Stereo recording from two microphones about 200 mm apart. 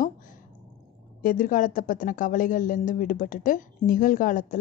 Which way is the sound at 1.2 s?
40° left (ahead or behind).